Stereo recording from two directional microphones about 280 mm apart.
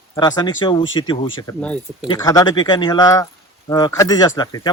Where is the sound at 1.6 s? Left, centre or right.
Centre.